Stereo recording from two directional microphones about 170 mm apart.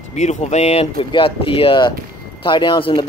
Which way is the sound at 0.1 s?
45° left (ahead or behind).